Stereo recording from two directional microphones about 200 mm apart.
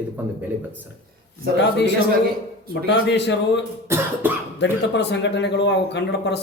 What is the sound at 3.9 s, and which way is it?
Speech, 10° right (ahead or behind).